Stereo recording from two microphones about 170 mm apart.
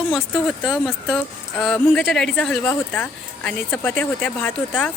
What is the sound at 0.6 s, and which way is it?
Speech, centre (ahead or behind).